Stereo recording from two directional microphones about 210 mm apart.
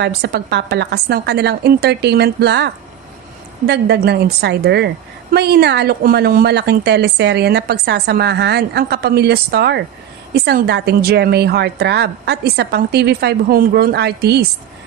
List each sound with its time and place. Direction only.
0.0 s a woman's voice: 50° right (ahead or behind)